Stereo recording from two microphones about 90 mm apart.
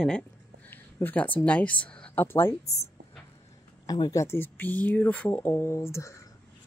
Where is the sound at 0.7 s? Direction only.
20° left (ahead or behind).